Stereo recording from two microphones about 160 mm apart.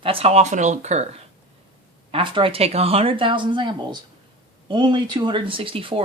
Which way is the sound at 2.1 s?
30° right (ahead or behind).